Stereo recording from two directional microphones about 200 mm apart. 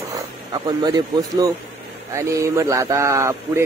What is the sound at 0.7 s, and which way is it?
Speech, 20° right (ahead or behind).